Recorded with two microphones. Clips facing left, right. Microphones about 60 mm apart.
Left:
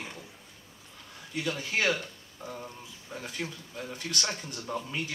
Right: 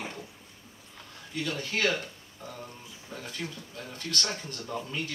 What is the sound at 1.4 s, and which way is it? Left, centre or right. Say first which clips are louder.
Speech: even; centre.